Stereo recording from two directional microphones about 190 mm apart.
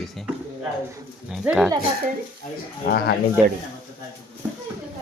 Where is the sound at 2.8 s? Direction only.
55° left (ahead or behind).